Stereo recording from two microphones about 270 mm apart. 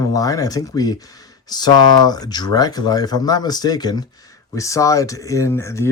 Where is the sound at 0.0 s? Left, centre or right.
Centre.